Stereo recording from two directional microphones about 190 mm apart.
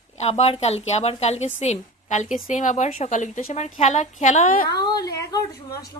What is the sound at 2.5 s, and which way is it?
A woman's voice, 40° left (ahead or behind).